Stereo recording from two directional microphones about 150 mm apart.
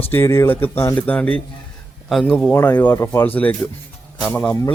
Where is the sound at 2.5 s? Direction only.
15° left (ahead or behind).